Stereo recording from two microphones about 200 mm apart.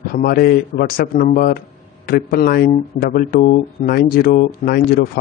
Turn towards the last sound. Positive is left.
turn(degrees=50)  # may be behind; listen again after turning